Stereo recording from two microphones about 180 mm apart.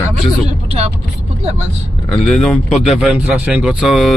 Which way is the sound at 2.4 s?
Centre (ahead or behind).